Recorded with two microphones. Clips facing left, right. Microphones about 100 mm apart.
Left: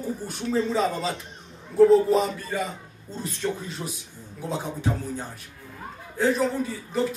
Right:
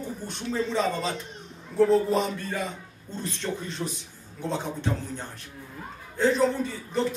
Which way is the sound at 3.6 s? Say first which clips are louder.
Right 1 dB; 10° left (ahead or behind).